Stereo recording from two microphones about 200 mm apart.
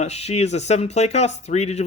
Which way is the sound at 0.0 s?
30° left (ahead or behind).